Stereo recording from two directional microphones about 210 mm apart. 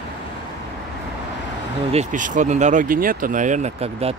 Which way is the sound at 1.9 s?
35° right (ahead or behind).